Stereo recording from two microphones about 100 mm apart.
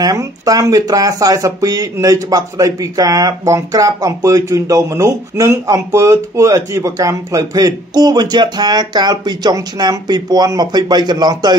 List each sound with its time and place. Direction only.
0.0 s speech: 40° right (ahead or behind)